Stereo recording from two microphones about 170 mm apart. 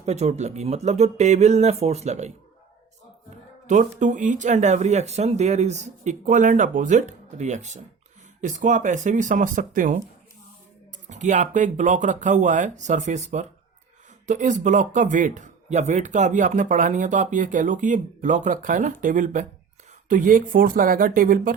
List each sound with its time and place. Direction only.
0.0 s speech: 40° right (ahead or behind)
11.1 s speech: 45° right (ahead or behind)